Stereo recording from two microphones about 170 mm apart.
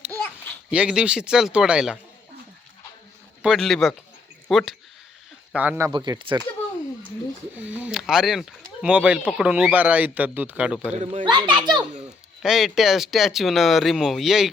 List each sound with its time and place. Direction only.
0.7 s speech: 5° right (ahead or behind)
3.4 s speech: centre (ahead or behind)
5.5 s speech: 10° right (ahead or behind)
5.9 s speech: 30° right (ahead or behind)
7.5 s speech: 10° right (ahead or behind)
10.9 s a child's voice: 40° right (ahead or behind)
11.3 s speech: 30° right (ahead or behind)
12.4 s speech: centre (ahead or behind)